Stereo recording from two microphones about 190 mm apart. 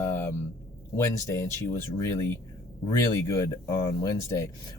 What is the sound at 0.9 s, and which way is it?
Speech, 15° left (ahead or behind).